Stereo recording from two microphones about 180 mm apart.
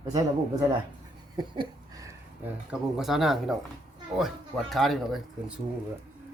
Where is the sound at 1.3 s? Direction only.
25° right (ahead or behind).